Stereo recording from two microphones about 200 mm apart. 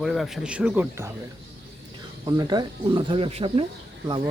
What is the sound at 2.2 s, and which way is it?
Speech, 20° right (ahead or behind).